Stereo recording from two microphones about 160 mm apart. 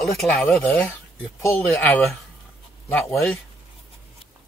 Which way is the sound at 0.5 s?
15° left (ahead or behind).